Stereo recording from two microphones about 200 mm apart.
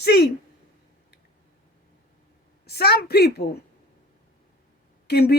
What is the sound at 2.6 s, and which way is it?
Speech, 55° left (ahead or behind).